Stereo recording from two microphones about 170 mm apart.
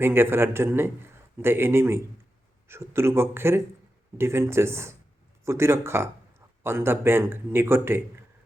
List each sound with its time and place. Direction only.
0.0 s a man's voice: 15° right (ahead or behind)